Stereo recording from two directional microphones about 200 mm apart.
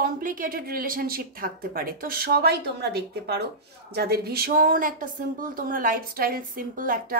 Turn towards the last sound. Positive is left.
turn(degrees=-45)  # may be behind; listen again after turning